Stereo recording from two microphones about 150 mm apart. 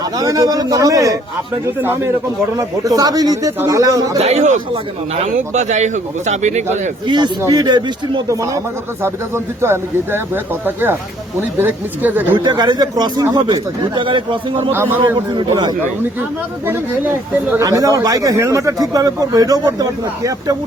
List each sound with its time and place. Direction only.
0.2 s speech: 25° right (ahead or behind)
4.2 s speech: 45° right (ahead or behind)
7.1 s speech: 30° right (ahead or behind)
9.6 s speech: 15° right (ahead or behind)
11.3 s speech: 15° right (ahead or behind)
12.5 s speech: 30° right (ahead or behind)
14.7 s speech: 15° right (ahead or behind)
15.4 s a man's voice: 30° right (ahead or behind)
16.6 s speech: 15° right (ahead or behind)